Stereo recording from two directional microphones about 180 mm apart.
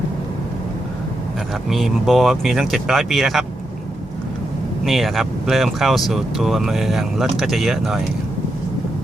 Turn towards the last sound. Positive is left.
turn(degrees=0)  # may be behind; listen again after turning